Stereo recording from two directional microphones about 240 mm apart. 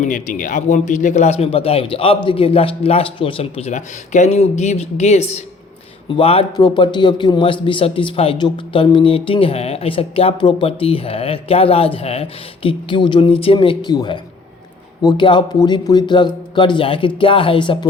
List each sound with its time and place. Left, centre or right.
0.0 s a man's voice: left